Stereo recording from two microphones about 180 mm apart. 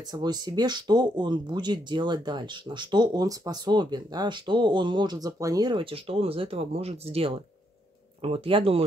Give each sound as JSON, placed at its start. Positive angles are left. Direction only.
{"t": 0.1, "sound": "speech", "side_deg": -25}